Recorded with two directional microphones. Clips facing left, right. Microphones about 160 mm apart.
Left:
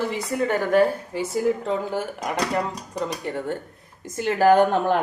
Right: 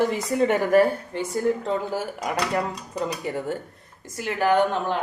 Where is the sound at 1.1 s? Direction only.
5° left (ahead or behind).